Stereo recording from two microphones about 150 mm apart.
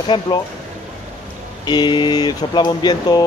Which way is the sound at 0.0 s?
30° left (ahead or behind).